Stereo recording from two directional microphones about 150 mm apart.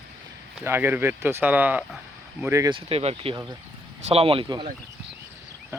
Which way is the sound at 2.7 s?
40° right (ahead or behind).